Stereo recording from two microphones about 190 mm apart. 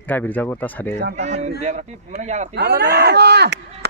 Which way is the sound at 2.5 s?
60° right (ahead or behind).